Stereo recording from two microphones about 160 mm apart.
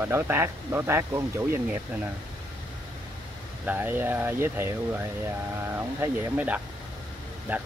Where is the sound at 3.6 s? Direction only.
10° right (ahead or behind).